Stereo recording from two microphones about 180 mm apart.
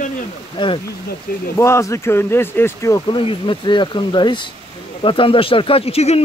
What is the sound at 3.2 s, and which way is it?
Speech, 30° left (ahead or behind).